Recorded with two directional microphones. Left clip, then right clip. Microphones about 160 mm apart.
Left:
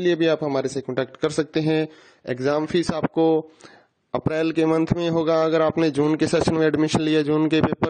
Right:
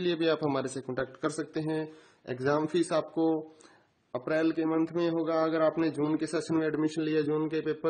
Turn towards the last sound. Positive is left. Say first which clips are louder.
# left 9 dB
turn(degrees=70)  # may be behind; listen again after turning